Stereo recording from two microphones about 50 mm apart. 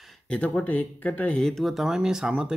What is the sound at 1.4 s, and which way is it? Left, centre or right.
Speech, centre.